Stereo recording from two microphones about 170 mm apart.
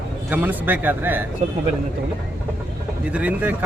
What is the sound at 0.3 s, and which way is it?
Speech, 10° right (ahead or behind).